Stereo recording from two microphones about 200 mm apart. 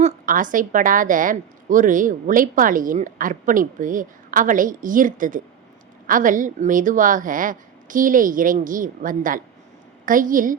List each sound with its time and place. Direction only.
0.0 s a woman's voice: 40° right (ahead or behind)